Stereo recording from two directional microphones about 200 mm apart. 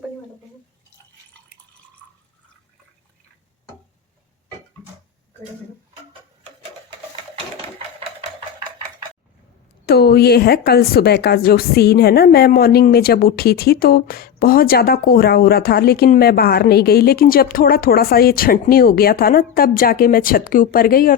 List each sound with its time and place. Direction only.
9.8 s speech: 50° left (ahead or behind)